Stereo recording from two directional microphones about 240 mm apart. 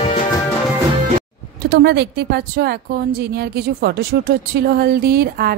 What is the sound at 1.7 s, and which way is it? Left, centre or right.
A woman's voice, right.